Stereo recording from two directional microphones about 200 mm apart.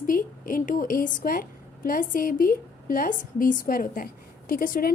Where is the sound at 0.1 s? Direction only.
45° left (ahead or behind).